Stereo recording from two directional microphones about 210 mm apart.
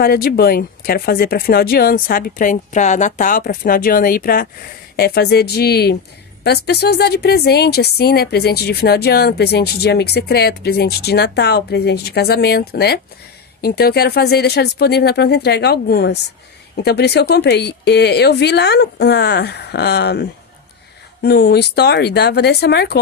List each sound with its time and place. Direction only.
0.0 s a woman's voice: 45° left (ahead or behind)